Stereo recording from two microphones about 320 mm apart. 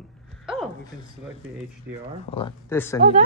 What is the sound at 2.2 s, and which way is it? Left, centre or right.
Speech, centre.